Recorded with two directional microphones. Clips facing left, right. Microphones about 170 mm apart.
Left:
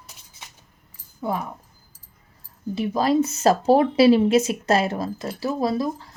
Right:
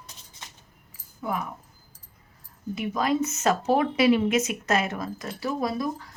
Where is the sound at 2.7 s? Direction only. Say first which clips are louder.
Left 5 dB; 30° left (ahead or behind).